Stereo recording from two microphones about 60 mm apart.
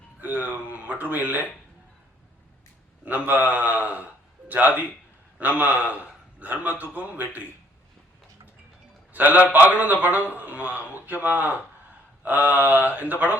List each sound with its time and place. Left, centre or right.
0.2 s a man's voice: right
3.0 s a man's voice: right
9.1 s a man's voice: right